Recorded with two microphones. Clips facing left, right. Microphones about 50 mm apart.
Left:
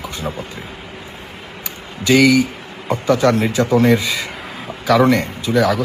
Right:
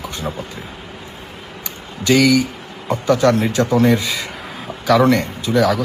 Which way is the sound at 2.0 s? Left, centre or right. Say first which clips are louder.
Left 1 dB; centre.